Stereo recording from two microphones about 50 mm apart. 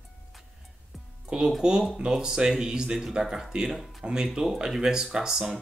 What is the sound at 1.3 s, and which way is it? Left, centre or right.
Speech, centre.